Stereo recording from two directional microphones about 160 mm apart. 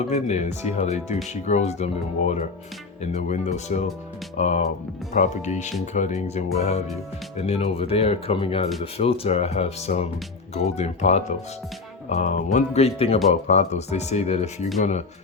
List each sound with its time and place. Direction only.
0.1 s speech: 45° left (ahead or behind)
7.3 s speech: 40° left (ahead or behind)